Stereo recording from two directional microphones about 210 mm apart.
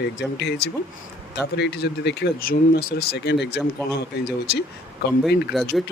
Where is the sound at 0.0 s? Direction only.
50° left (ahead or behind).